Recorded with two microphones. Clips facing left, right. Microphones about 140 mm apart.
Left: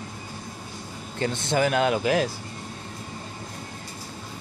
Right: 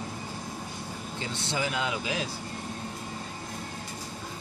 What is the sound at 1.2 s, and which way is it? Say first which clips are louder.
Speech: left 9 dB; 55° left (ahead or behind).